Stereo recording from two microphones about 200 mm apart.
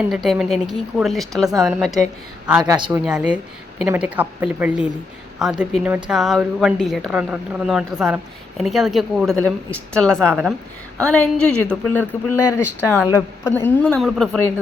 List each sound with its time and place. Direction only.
0.1 s speech: centre (ahead or behind)
2.6 s speech: 20° right (ahead or behind)
3.0 s a woman's voice: 5° right (ahead or behind)